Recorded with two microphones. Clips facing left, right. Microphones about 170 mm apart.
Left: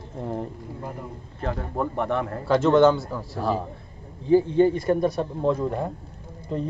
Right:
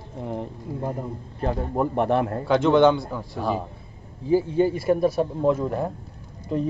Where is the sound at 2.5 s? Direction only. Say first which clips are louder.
Even; centre (ahead or behind).